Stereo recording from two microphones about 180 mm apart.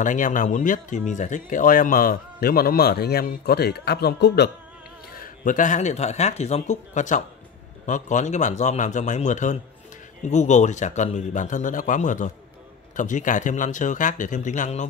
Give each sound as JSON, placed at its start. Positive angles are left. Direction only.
{"t": 0.0, "sound": "speech", "side_deg": 45}
{"t": 5.1, "sound": "speech", "side_deg": 50}